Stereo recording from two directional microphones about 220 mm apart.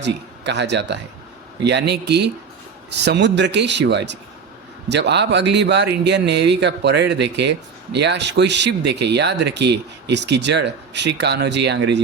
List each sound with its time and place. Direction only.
0.0 s a man's voice: 50° right (ahead or behind)